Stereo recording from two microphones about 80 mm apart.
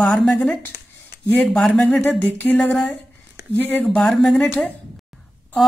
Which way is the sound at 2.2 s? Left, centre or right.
Left.